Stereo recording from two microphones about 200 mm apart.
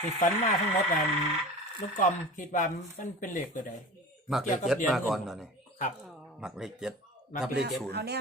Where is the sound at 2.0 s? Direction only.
40° left (ahead or behind).